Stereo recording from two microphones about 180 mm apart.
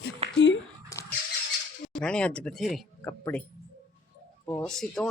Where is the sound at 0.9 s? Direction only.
20° left (ahead or behind).